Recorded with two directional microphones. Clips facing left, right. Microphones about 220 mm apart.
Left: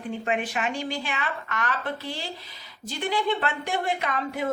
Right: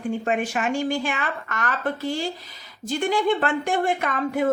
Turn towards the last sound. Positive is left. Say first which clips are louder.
# right 5 dB
turn(degrees=-50)  # may be behind; listen again after turning